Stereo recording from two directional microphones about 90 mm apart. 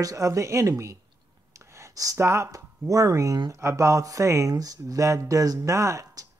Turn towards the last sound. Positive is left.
turn(degrees=-35)  # may be behind; listen again after turning